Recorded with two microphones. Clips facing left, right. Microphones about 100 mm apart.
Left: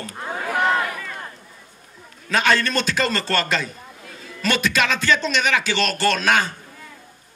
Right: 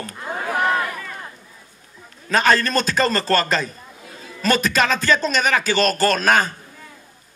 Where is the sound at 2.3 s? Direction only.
40° right (ahead or behind).